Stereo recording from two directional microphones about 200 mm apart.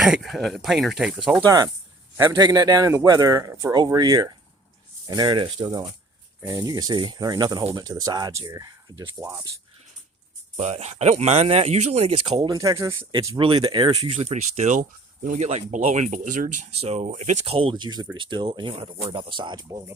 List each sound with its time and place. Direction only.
0.0 s speech: centre (ahead or behind)
1.5 s a man's voice: 15° right (ahead or behind)
10.6 s a man's voice: 35° right (ahead or behind); by 19.9 s 20° right (ahead or behind)